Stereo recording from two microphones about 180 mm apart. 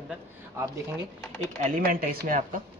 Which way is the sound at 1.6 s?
50° right (ahead or behind).